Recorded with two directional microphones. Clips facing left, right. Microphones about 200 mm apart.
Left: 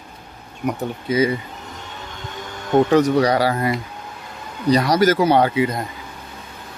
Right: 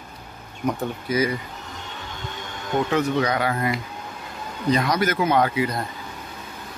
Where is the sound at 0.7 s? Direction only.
20° left (ahead or behind).